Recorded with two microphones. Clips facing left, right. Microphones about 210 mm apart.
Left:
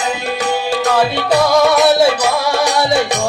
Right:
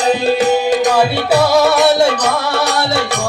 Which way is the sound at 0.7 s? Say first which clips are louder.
Right 2 dB; 15° right (ahead or behind).